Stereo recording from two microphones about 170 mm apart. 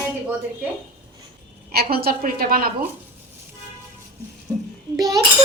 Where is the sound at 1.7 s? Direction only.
60° right (ahead or behind).